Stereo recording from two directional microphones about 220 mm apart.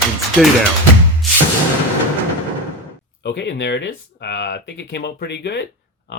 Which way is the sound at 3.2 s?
50° left (ahead or behind).